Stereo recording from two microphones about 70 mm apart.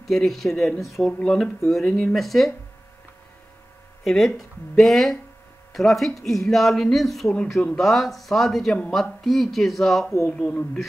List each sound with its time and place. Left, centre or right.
0.0 s speech: centre
2.1 s speech: centre
4.0 s speech: centre
10.4 s speech: centre